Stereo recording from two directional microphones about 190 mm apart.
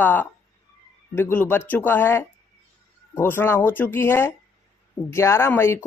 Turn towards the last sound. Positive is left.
turn(degrees=10)  # may be behind; listen again after turning